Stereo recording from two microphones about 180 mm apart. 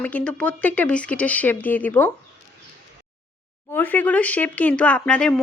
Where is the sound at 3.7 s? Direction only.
10° left (ahead or behind).